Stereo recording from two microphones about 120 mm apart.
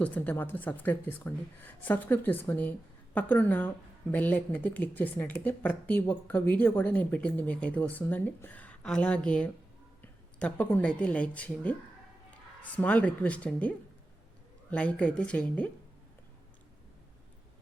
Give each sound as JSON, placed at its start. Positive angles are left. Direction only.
{"t": 0.0, "sound": "speech", "side_deg": 15}